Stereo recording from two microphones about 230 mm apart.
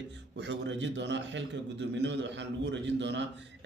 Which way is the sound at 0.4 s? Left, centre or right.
Right.